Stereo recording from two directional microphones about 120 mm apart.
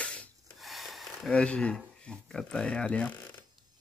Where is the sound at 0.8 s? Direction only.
10° left (ahead or behind).